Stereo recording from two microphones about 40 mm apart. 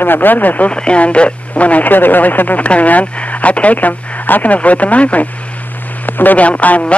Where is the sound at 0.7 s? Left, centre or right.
Left.